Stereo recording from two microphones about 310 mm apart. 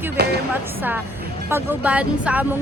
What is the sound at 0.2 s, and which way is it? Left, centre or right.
Music, right.